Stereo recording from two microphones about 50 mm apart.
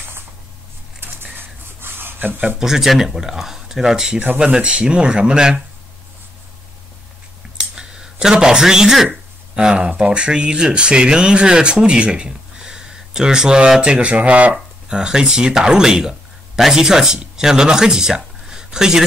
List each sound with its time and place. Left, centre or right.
1.0 s a sound: right
2.6 s speech: centre
7.7 s speech: centre
14.9 s speech: centre